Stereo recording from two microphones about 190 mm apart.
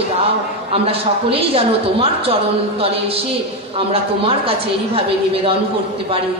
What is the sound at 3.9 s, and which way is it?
A woman's voice, 30° right (ahead or behind).